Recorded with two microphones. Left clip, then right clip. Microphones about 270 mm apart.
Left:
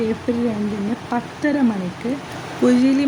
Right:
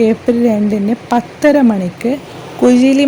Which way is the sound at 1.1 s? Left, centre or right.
Right.